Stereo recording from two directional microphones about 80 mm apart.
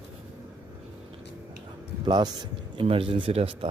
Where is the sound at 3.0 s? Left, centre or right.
Right.